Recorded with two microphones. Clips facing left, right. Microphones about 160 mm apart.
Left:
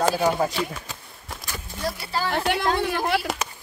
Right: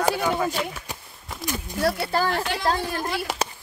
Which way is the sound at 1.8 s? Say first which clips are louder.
Right 5 dB; 55° right (ahead or behind).